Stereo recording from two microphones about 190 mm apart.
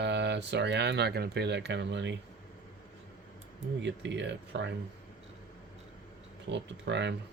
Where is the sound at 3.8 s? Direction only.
70° right (ahead or behind).